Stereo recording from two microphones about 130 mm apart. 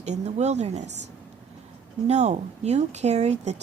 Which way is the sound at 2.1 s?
60° right (ahead or behind).